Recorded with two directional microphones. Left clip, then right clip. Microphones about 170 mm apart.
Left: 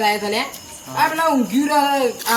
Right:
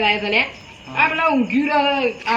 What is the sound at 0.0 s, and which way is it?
Speech, 15° left (ahead or behind).